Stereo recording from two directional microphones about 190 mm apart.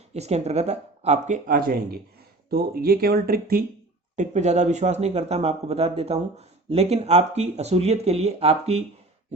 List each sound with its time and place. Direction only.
0.1 s speech: 35° right (ahead or behind); by 3.6 s 50° right (ahead or behind)
4.1 s speech: 40° right (ahead or behind)